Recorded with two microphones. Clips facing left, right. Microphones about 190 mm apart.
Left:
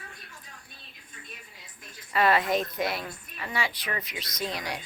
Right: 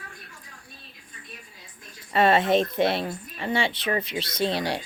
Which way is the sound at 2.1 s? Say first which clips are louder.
Right 4 dB; 25° right (ahead or behind).